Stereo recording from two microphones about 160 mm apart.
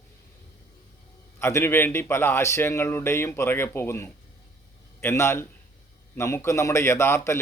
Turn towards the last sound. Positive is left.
turn(degrees=15)  # may be behind; listen again after turning